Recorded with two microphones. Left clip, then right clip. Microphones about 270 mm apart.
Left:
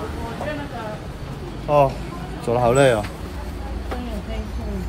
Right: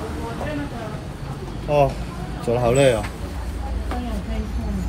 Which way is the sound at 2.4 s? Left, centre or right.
Centre.